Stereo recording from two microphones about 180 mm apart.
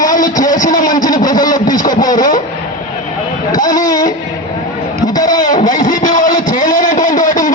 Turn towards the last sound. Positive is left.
turn(degrees=45)  # may be behind; listen again after turning